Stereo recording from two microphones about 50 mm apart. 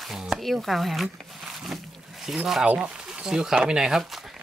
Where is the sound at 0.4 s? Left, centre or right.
Centre.